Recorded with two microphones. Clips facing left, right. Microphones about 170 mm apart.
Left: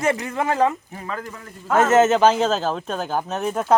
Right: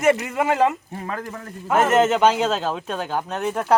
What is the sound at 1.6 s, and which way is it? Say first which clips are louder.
Speech: left 1 dB; 10° right (ahead or behind).